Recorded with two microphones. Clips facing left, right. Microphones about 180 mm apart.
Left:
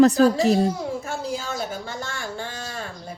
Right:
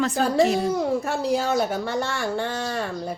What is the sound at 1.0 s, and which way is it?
Speech, 65° right (ahead or behind).